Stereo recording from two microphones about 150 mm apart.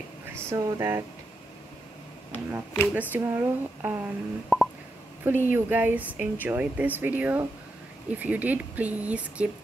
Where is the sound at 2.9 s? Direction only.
10° right (ahead or behind).